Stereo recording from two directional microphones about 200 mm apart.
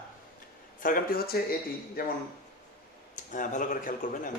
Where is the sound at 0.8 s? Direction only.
45° left (ahead or behind).